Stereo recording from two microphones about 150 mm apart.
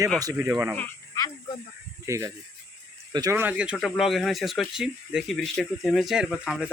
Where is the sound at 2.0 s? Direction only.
20° right (ahead or behind).